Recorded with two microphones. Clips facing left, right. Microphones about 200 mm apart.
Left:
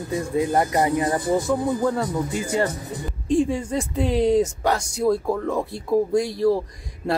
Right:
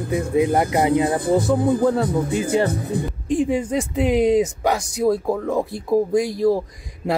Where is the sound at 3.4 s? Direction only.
15° right (ahead or behind).